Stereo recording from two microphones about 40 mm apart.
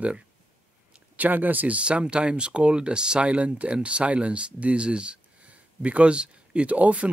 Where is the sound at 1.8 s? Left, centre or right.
Right.